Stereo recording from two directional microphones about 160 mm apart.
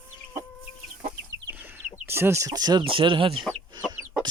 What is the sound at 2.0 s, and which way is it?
Speech, 15° right (ahead or behind).